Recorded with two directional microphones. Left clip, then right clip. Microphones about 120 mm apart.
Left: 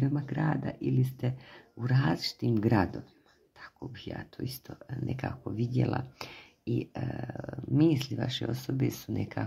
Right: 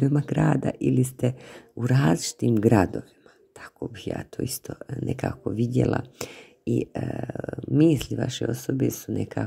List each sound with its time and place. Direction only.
0.0 s speech: 60° right (ahead or behind); by 9.4 s 40° right (ahead or behind)